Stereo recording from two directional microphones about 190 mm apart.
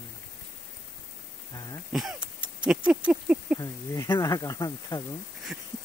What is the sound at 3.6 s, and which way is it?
Speech, 15° left (ahead or behind).